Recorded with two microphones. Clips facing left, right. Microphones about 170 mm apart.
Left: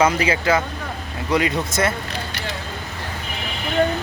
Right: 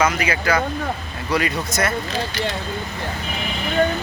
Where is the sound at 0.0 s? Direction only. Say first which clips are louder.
Left 2 dB; 30° left (ahead or behind).